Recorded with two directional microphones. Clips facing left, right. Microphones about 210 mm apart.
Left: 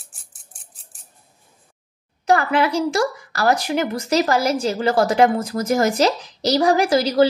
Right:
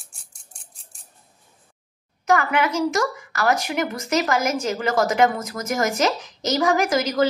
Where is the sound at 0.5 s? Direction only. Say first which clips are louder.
Even; 5° left (ahead or behind).